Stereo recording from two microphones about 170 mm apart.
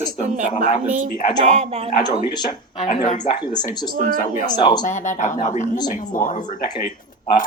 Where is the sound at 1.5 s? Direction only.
40° right (ahead or behind).